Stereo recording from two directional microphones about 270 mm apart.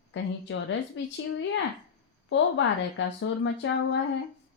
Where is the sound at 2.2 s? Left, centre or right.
Left.